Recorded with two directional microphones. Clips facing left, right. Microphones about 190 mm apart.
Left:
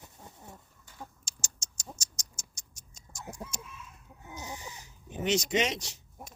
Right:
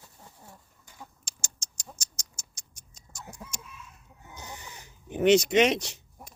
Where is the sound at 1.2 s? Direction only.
60° right (ahead or behind).